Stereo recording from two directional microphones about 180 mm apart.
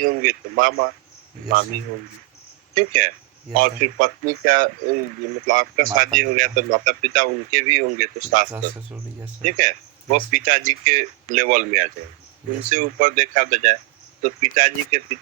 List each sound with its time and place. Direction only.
0.0 s speech: 50° right (ahead or behind)
2.7 s speech: 50° right (ahead or behind)
8.5 s speech: 10° right (ahead or behind)
9.4 s speech: 45° right (ahead or behind)